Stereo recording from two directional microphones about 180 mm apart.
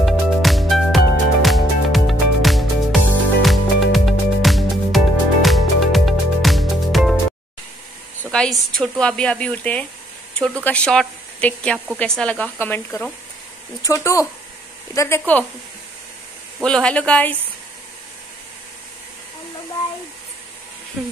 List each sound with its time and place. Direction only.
0.0 s music: centre (ahead or behind)
8.2 s speech: 5° left (ahead or behind)
16.5 s speech: 5° left (ahead or behind)